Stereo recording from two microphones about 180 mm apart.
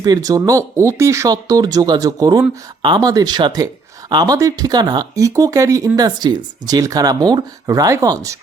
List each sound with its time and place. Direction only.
0.0 s speech: 20° right (ahead or behind)